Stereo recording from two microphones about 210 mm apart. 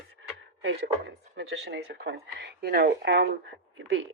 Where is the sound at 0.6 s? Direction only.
55° right (ahead or behind).